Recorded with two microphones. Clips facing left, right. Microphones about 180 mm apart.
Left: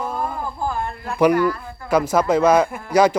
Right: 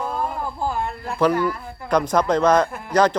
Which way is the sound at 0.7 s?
20° right (ahead or behind).